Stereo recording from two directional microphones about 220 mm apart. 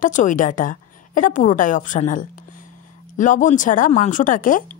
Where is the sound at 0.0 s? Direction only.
35° left (ahead or behind).